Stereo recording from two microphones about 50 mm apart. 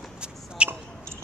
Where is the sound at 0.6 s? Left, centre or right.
Right.